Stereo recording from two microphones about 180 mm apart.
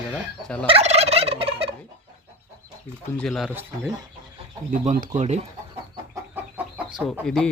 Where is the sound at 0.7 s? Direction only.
35° right (ahead or behind).